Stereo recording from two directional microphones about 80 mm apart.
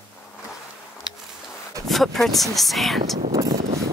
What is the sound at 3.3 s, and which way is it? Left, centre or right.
Vehicle, right.